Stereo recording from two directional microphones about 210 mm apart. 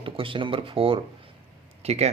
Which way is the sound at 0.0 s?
25° right (ahead or behind).